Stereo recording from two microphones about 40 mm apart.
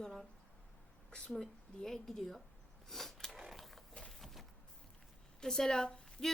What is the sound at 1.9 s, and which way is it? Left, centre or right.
Speech, centre.